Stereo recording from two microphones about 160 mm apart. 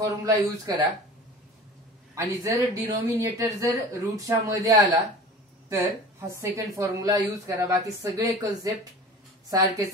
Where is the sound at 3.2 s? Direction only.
20° right (ahead or behind).